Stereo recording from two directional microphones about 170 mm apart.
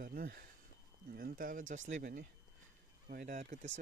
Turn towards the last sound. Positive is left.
turn(degrees=-45)  # may be behind; listen again after turning